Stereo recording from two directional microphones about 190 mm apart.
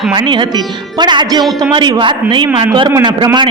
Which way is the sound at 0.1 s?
25° right (ahead or behind).